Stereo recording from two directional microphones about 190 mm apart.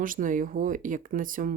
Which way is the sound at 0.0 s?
45° right (ahead or behind).